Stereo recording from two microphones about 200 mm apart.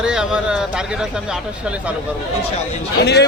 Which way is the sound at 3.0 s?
55° left (ahead or behind).